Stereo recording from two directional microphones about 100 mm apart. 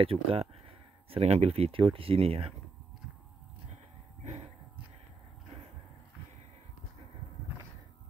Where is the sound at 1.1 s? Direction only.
90° right.